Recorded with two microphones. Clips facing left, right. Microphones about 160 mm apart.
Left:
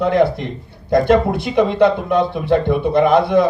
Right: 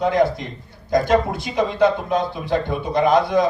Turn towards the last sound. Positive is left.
turn(degrees=60)  # may be behind; listen again after turning